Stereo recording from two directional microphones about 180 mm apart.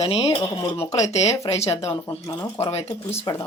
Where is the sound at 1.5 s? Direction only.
15° left (ahead or behind).